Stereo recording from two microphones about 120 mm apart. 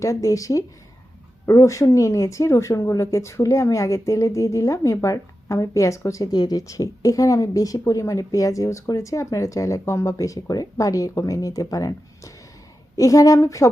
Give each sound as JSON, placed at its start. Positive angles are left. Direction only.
{"t": 0.0, "sound": "speech", "side_deg": 25}